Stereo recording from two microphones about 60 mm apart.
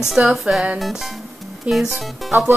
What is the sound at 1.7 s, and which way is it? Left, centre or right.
Music, centre.